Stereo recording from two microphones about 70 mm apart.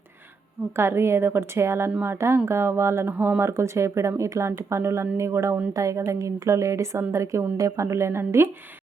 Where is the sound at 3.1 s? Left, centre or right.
Right.